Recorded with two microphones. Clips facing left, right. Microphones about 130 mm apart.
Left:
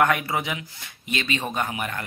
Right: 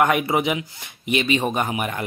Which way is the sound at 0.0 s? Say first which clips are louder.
Right 3 dB; 15° right (ahead or behind).